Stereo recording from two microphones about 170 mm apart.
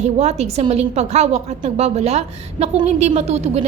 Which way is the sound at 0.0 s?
40° right (ahead or behind).